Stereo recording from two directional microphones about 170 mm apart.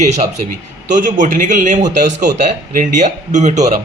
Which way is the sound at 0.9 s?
50° right (ahead or behind).